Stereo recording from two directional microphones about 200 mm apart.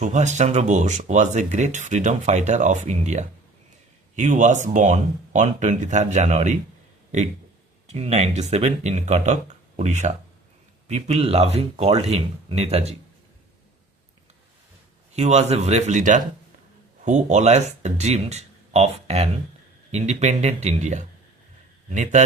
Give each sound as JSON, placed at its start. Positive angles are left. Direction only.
{"t": 0.0, "sound": "speech", "side_deg": -35}
{"t": 7.9, "sound": "speech", "side_deg": -35}
{"t": 15.1, "sound": "speech", "side_deg": -35}